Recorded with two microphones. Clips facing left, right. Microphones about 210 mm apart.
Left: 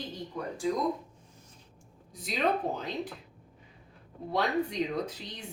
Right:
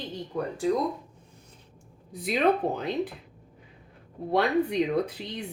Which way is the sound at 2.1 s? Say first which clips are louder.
Right 6 dB; 60° right (ahead or behind).